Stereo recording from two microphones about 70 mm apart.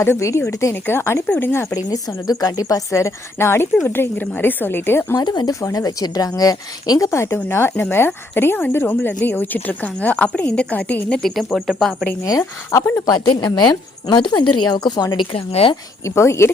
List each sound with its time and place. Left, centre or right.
0.0 s a woman's voice: left
1.7 s a woman's voice: left
5.1 s speech: left
5.5 s a woman's voice: left
7.1 s a woman's voice: left
11.2 s speech: centre
12.7 s speech: left
13.1 s a woman's voice: left
16.0 s a woman's voice: left